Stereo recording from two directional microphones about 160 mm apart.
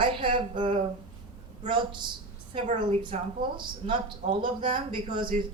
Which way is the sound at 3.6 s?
30° right (ahead or behind).